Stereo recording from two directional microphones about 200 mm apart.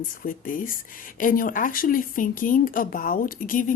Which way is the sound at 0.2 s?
45° left (ahead or behind).